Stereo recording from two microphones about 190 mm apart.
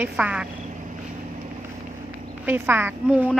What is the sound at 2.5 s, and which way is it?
Speech, 10° right (ahead or behind).